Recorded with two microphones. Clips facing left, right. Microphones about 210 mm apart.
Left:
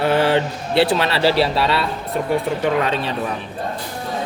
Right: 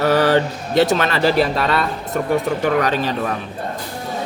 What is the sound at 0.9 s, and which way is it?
A woman's voice, 45° right (ahead or behind).